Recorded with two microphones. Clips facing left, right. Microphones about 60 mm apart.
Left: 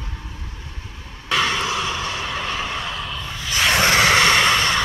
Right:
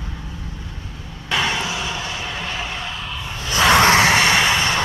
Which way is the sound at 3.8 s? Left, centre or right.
Right.